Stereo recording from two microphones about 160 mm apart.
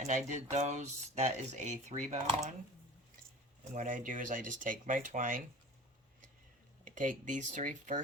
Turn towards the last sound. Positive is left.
turn(degrees=-50)  # may be behind; listen again after turning